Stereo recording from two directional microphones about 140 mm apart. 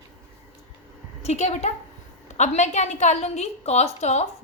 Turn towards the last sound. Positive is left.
turn(degrees=55)  # may be behind; listen again after turning